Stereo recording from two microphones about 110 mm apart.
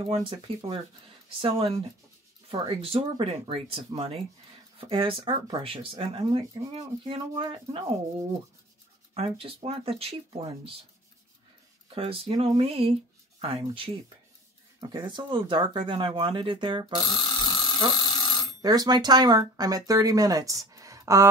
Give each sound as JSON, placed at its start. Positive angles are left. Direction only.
{"t": 0.0, "sound": "speech", "side_deg": -60}
{"t": 1.4, "sound": "speech", "side_deg": -60}
{"t": 9.1, "sound": "speech", "side_deg": -60}
{"t": 11.9, "sound": "speech", "side_deg": -55}
{"t": 17.0, "sound": "alarm", "side_deg": 40}
{"t": 17.9, "sound": "a sound", "side_deg": 40}
{"t": 18.6, "sound": "speech", "side_deg": -35}